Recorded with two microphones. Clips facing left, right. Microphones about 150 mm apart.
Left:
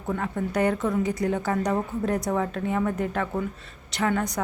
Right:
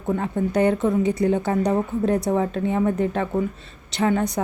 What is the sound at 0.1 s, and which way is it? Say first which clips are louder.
A woman's voice: right 5 dB; 25° right (ahead or behind).